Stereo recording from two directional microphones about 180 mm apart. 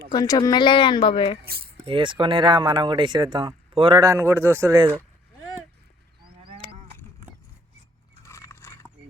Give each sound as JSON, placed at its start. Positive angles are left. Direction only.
{"t": 0.1, "sound": "speech", "side_deg": 20}
{"t": 1.4, "sound": "a sound", "side_deg": -60}
{"t": 1.8, "sound": "speech", "side_deg": -30}
{"t": 6.6, "sound": "livestock", "side_deg": 30}
{"t": 8.2, "sound": "biting", "side_deg": 15}